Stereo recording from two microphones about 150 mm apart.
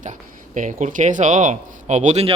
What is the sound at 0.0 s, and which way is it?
Speech, 60° right (ahead or behind).